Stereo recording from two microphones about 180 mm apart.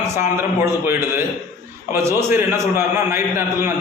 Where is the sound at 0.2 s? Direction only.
15° right (ahead or behind).